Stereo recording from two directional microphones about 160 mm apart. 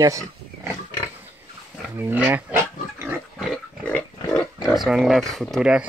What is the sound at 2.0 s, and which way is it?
Pig, 10° right (ahead or behind).